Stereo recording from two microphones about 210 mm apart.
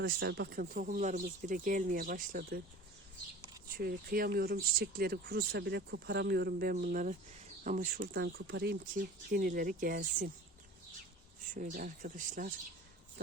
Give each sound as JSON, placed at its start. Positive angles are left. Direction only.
{"t": 0.0, "sound": "speech", "side_deg": -50}
{"t": 3.8, "sound": "speech", "side_deg": -45}
{"t": 8.1, "sound": "speech", "side_deg": -55}
{"t": 11.5, "sound": "speech", "side_deg": -40}